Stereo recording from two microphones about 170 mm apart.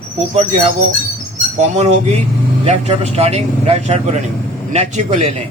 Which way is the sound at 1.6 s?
40° right (ahead or behind).